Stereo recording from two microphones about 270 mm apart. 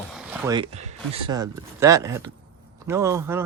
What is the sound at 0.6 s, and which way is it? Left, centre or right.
Speech, right.